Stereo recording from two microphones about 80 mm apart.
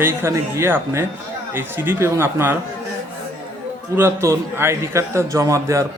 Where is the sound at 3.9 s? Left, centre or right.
Right.